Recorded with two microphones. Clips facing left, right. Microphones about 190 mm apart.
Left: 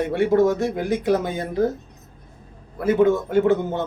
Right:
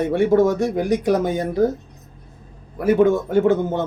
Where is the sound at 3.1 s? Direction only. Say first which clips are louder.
Right 1 dB; 15° right (ahead or behind).